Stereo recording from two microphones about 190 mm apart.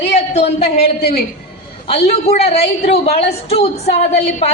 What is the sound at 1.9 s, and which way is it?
A woman's voice, 35° left (ahead or behind).